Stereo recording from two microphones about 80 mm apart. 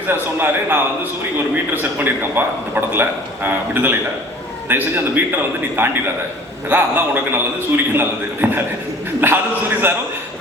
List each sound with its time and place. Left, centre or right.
0.1 s a man's voice: right